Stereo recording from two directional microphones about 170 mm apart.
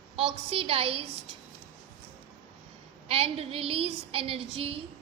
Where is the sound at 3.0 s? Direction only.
35° right (ahead or behind).